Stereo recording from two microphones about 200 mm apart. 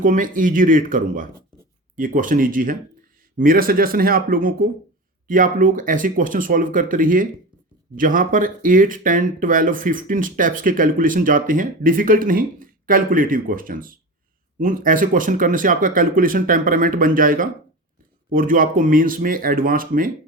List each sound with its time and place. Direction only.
0.0 s speech: 40° right (ahead or behind)